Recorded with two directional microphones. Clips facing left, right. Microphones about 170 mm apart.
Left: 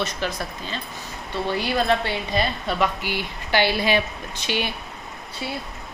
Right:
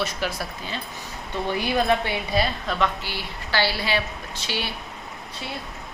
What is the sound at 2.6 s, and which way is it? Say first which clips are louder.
A woman's voice: left 2 dB; 10° left (ahead or behind).